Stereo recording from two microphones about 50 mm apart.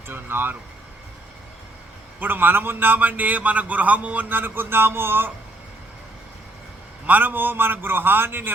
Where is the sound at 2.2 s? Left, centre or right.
Right.